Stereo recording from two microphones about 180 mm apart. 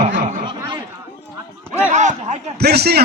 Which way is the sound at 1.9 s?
40° right (ahead or behind).